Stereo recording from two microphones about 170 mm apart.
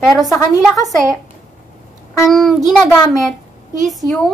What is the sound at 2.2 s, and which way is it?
A woman's voice, centre (ahead or behind).